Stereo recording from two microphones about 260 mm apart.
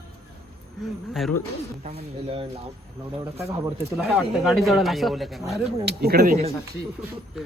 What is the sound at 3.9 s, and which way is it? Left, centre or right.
Speech, centre.